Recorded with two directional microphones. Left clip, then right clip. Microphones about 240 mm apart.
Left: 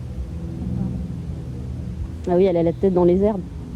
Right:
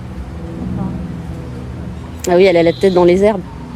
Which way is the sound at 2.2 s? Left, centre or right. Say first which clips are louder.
Right 8 dB; centre.